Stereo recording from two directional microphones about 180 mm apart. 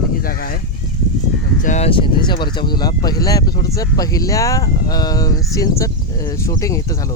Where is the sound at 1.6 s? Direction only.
40° left (ahead or behind).